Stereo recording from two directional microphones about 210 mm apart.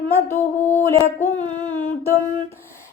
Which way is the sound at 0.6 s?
10° left (ahead or behind).